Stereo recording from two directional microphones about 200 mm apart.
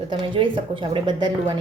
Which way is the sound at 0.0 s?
25° right (ahead or behind).